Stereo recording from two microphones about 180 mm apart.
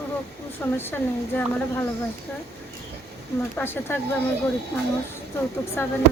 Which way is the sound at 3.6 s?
10° left (ahead or behind).